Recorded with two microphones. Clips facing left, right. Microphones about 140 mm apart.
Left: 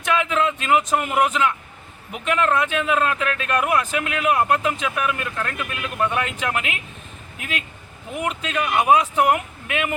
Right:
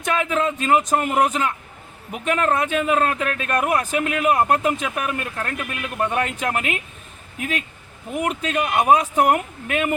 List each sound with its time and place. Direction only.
0.0 s speech: 40° right (ahead or behind)
8.1 s speech: 45° right (ahead or behind)